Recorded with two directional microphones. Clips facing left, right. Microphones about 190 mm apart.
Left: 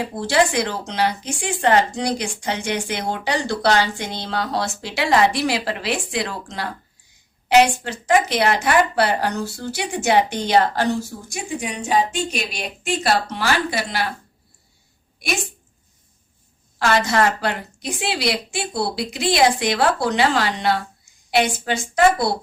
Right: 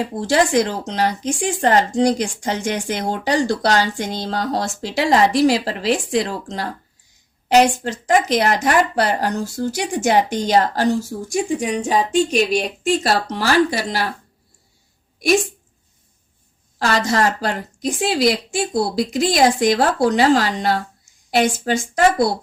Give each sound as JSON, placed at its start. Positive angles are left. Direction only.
{"t": 0.2, "sound": "a woman's voice", "side_deg": -45}
{"t": 16.7, "sound": "speech", "side_deg": -35}